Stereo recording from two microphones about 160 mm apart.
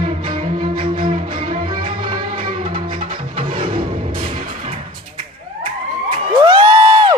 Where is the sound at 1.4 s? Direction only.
50° right (ahead or behind).